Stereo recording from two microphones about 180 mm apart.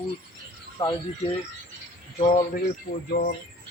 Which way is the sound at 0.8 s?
20° left (ahead or behind).